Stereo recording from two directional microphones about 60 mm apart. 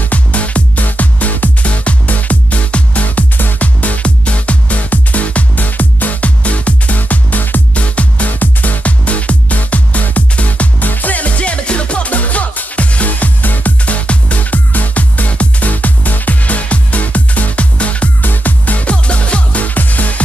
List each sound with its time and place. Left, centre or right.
0.1 s music: left